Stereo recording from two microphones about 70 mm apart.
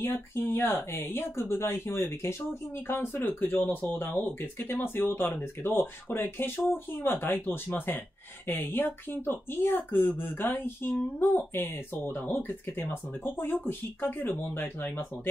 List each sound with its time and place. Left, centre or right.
0.0 s speech: left